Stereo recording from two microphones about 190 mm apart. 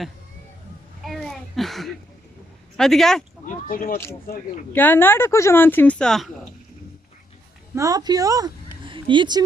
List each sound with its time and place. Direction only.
1.0 s a sound: centre (ahead or behind)
2.7 s speech: centre (ahead or behind)
3.4 s speech: 45° left (ahead or behind)
4.7 s speech: 10° left (ahead or behind)
7.8 s speech: 20° right (ahead or behind)